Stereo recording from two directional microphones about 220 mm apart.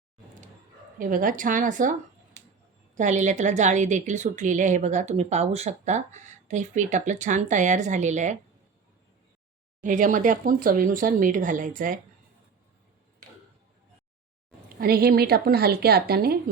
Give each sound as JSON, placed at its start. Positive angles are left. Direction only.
{"t": 0.9, "sound": "a woman's voice", "side_deg": -40}
{"t": 9.8, "sound": "a woman's voice", "side_deg": -35}
{"t": 14.8, "sound": "a woman's voice", "side_deg": -45}